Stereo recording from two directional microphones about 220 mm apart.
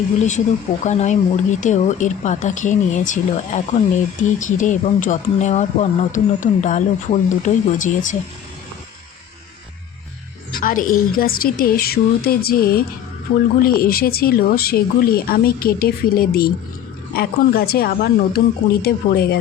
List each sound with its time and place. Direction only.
0.2 s speech: 30° left (ahead or behind)
10.6 s speech: 40° left (ahead or behind)